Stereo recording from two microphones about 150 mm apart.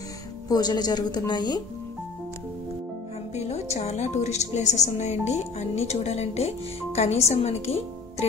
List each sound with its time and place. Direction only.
0.5 s a woman's voice: 25° left (ahead or behind)
3.3 s a woman's voice: 50° left (ahead or behind)